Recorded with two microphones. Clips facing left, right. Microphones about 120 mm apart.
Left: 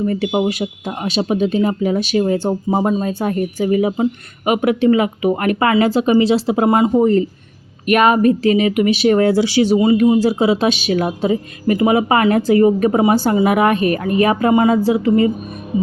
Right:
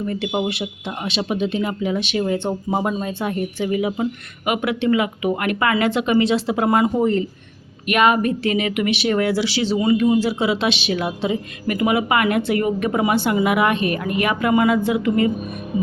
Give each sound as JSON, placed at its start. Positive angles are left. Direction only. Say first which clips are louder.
{"t": 0.0, "sound": "speech", "louder": "left 5 dB", "side_deg": 35}
{"t": 7.0, "sound": "speech", "louder": "left 5 dB", "side_deg": 40}
{"t": 9.3, "sound": "speech", "louder": "left 6 dB", "side_deg": 20}
{"t": 10.2, "sound": "speech", "louder": "left 5 dB", "side_deg": 40}
{"t": 11.6, "sound": "speech", "louder": "left 5 dB", "side_deg": 30}